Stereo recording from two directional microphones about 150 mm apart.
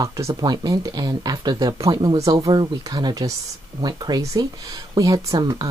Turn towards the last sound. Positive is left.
turn(degrees=-25)  # may be behind; listen again after turning